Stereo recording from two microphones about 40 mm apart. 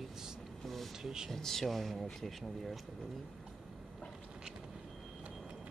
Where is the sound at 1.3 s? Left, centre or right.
Centre.